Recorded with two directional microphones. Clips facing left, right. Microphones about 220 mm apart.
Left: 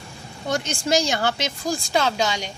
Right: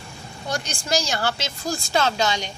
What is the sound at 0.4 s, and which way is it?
A woman's voice, 20° left (ahead or behind).